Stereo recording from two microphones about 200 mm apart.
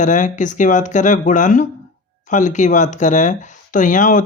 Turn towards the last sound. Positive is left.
turn(degrees=40)  # may be behind; listen again after turning